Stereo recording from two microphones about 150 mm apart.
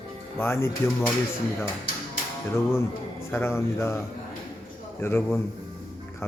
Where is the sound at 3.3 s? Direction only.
15° left (ahead or behind).